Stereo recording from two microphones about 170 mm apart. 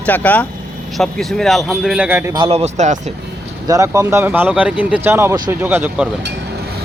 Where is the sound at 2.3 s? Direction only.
35° right (ahead or behind).